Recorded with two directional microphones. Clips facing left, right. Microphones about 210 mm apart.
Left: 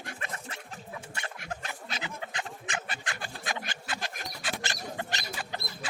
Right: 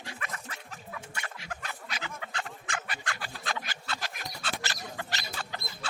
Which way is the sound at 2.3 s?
20° left (ahead or behind).